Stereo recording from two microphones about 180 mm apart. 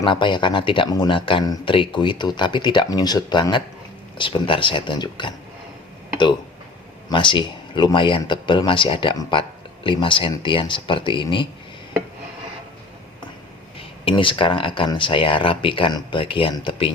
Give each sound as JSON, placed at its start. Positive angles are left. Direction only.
{"t": 0.0, "sound": "speech", "side_deg": 25}
{"t": 7.1, "sound": "speech", "side_deg": 25}
{"t": 13.7, "sound": "speech", "side_deg": 30}